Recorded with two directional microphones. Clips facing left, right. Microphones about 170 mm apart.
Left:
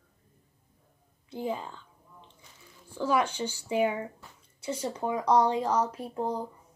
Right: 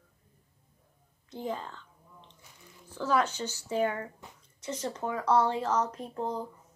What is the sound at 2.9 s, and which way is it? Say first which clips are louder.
Speech: left 1 dB; 10° left (ahead or behind).